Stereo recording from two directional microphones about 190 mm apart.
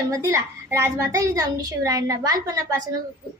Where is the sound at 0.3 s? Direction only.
15° right (ahead or behind).